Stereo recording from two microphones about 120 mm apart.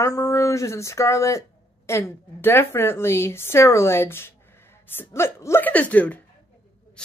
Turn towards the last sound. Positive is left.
turn(degrees=15)  # may be behind; listen again after turning